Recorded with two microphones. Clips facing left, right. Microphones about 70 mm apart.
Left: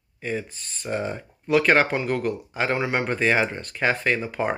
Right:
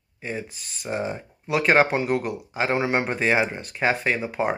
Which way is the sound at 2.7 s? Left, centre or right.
Right.